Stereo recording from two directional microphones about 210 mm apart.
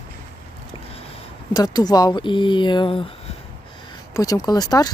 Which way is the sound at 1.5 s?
20° left (ahead or behind).